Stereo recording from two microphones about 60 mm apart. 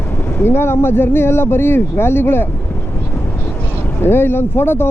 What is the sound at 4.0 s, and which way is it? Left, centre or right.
Speech, left.